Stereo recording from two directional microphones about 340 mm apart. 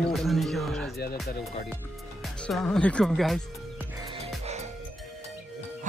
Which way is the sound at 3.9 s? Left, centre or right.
Centre.